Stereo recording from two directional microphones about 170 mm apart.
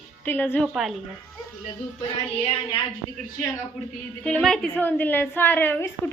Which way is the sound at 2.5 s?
25° left (ahead or behind).